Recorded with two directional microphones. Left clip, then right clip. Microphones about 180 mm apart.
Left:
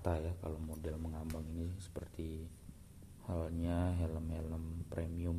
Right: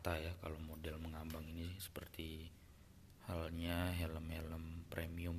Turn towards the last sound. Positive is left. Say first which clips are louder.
# left 4 dB
turn(degrees=5)  # may be behind; listen again after turning